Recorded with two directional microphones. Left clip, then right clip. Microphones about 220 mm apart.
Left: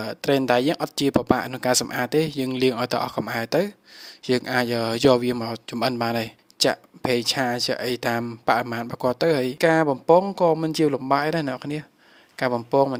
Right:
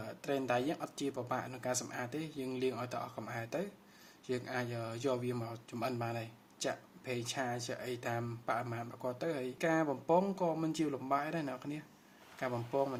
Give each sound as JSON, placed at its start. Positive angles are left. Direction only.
{"t": 0.0, "sound": "speech", "side_deg": 50}